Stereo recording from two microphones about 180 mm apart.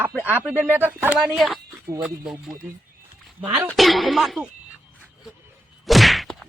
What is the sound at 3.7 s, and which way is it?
Speech, centre (ahead or behind).